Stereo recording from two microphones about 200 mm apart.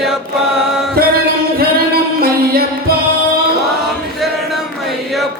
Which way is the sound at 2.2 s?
50° right (ahead or behind).